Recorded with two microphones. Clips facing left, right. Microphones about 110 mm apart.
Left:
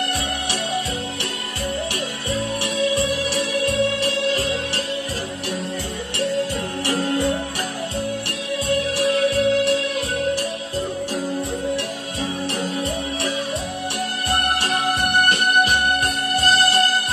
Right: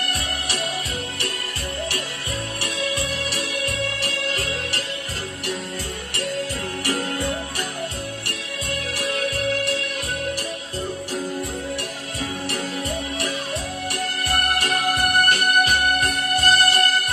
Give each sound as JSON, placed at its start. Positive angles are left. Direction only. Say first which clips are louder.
{"t": 2.6, "sound": "music", "louder": "left 5 dB", "side_deg": 25}
{"t": 6.1, "sound": "music", "louder": "left 5 dB", "side_deg": 25}
{"t": 8.6, "sound": "music", "louder": "left 8 dB", "side_deg": 30}
{"t": 12.4, "sound": "music", "louder": "left 2 dB", "side_deg": 25}
{"t": 14.3, "sound": "music", "louder": "left 1 dB", "side_deg": 25}